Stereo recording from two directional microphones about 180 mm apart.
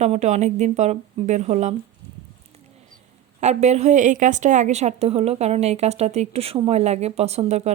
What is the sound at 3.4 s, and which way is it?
A woman's voice, 40° right (ahead or behind).